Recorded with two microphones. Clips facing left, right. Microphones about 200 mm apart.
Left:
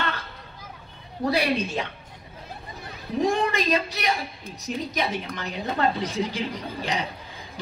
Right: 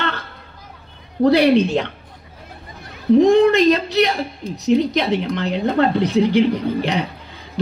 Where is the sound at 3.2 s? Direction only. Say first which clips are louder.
Right 11 dB; 65° right (ahead or behind).